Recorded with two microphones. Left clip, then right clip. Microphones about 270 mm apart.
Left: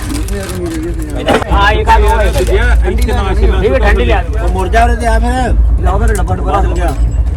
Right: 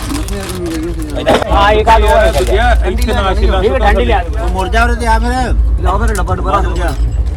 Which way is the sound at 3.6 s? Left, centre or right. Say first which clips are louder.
Left 1 dB; right.